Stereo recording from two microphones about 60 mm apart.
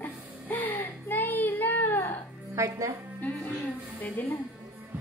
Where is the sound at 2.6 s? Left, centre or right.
Right.